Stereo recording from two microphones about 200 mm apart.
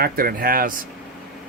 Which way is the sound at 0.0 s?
50° right (ahead or behind).